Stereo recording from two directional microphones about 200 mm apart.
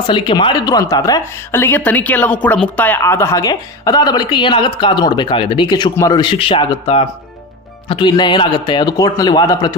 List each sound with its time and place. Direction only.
0.0 s a woman's voice: 25° left (ahead or behind)